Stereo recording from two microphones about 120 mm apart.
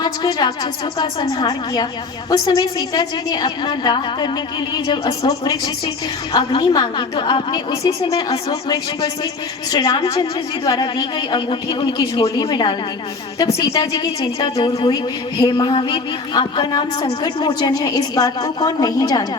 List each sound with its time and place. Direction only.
0.0 s speech: 35° left (ahead or behind)